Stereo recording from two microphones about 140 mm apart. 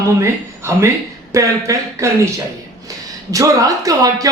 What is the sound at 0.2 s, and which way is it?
A man's voice, 20° right (ahead or behind).